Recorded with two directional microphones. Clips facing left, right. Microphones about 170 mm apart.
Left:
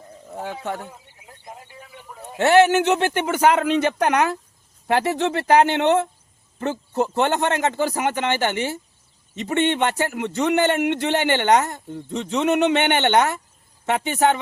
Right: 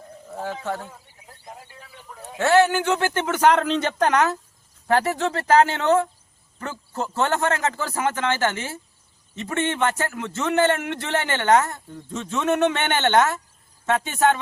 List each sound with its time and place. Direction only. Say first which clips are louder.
0.3 s a man's voice: even; 15° left (ahead or behind)
1.3 s a sound: left 1 dB; centre (ahead or behind)
2.4 s a man's voice: left 3 dB; 20° left (ahead or behind)